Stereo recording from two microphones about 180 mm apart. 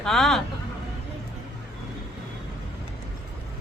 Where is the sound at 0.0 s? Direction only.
Centre (ahead or behind).